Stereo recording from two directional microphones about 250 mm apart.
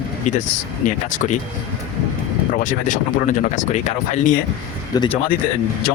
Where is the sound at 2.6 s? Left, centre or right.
Left.